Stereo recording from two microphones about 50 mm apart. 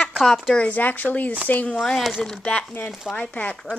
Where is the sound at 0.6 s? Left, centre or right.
Left.